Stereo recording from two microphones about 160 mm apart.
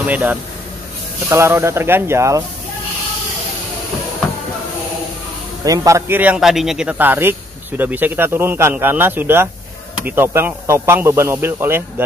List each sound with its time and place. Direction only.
0.0 s a man's voice: 10° right (ahead or behind)
5.7 s a man's voice: 20° right (ahead or behind)